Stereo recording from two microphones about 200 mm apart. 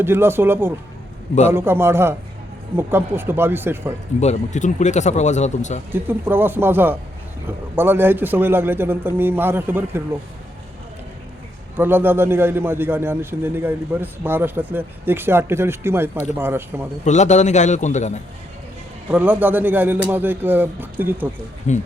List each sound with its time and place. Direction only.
0.0 s a man's voice: 10° right (ahead or behind)
4.2 s speech: 35° left (ahead or behind)
5.9 s a man's voice: 10° right (ahead or behind)
11.8 s a man's voice: 10° right (ahead or behind)
17.1 s speech: 35° left (ahead or behind)
19.1 s a man's voice: 10° right (ahead or behind)
21.7 s speech: 35° left (ahead or behind)